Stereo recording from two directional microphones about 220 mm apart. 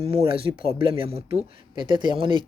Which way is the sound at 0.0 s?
25° right (ahead or behind).